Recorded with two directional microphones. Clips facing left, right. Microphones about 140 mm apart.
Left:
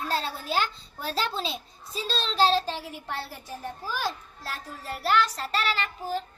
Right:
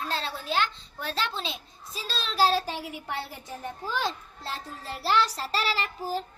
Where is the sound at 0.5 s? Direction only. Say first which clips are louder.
Even; 5° left (ahead or behind); by 5.1 s 25° right (ahead or behind).